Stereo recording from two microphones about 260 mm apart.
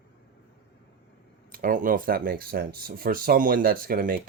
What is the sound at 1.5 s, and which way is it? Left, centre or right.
Speech, right.